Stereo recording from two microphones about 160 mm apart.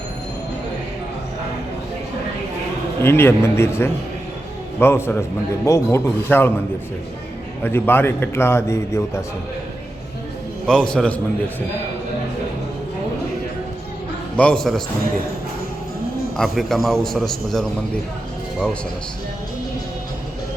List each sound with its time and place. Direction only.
3.0 s a man's voice: 15° left (ahead or behind)
7.6 s a man's voice: 15° left (ahead or behind)
10.7 s a man's voice: 5° left (ahead or behind)
14.3 s a man's voice: 5° left (ahead or behind)
16.4 s a man's voice: centre (ahead or behind)